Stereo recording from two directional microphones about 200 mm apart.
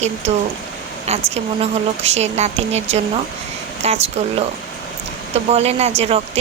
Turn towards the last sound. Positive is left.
turn(degrees=-30)  # may be behind; listen again after turning